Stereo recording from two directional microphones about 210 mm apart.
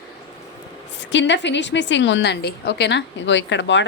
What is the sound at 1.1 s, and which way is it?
A woman's voice, 60° left (ahead or behind).